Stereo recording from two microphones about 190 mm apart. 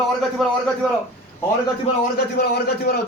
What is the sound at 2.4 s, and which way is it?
Speech, 55° left (ahead or behind).